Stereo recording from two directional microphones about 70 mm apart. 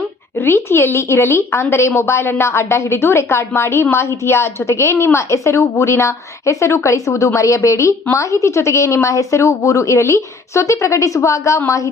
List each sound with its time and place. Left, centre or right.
0.3 s a woman's voice: left